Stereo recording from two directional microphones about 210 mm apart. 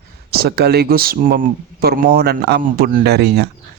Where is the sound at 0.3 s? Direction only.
50° right (ahead or behind).